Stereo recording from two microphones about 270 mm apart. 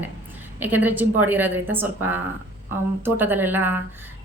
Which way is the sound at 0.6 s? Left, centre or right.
Centre.